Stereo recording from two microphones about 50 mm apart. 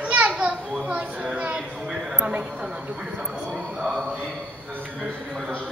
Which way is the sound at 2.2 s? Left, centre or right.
Right.